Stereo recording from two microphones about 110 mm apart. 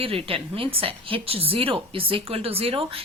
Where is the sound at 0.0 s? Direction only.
60° right (ahead or behind).